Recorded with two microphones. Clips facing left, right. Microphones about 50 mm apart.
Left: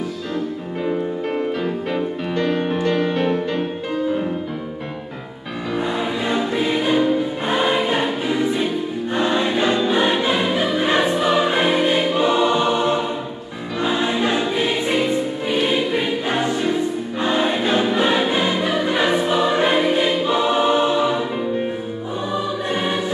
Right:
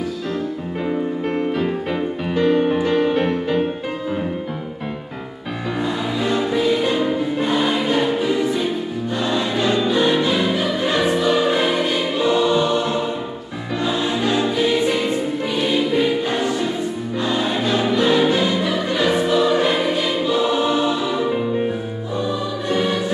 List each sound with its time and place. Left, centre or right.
0.8 s music: centre
5.8 s music: left
7.4 s choir: left
9.1 s music: left
9.7 s choir: left
15.4 s music: centre
17.2 s choir: left
22.7 s music: left